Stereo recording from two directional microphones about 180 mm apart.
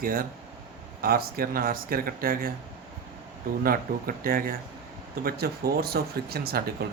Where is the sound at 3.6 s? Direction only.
55° right (ahead or behind).